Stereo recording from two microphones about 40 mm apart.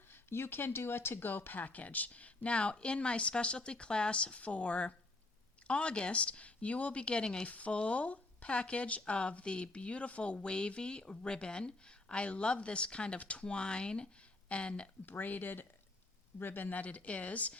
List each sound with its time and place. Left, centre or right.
0.1 s speech: left
7.4 s speech: left
15.0 s speech: left
16.7 s speech: left